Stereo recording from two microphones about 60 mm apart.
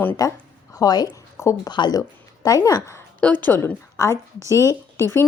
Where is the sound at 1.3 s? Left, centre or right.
Left.